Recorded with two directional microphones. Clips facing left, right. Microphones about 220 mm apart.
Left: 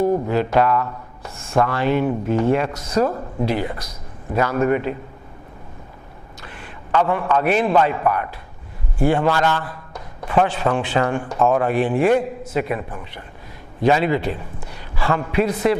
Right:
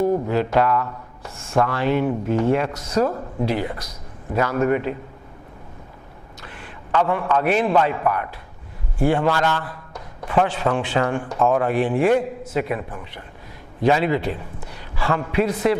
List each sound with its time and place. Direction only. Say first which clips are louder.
0.3 s speech: left 1 dB; 15° left (ahead or behind)
6.9 s speech: left 1 dB; 15° left (ahead or behind)
9.4 s a man's voice: left 2 dB; 25° left (ahead or behind)
10.2 s speech: left 1 dB; 15° left (ahead or behind)